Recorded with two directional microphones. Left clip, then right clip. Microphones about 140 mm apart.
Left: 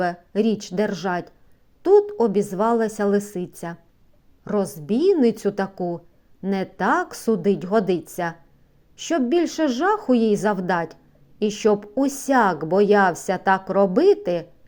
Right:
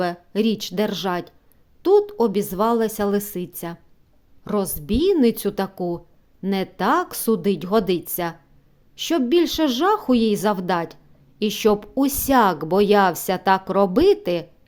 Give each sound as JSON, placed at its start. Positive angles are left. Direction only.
{"t": 0.0, "sound": "a woman's voice", "side_deg": -20}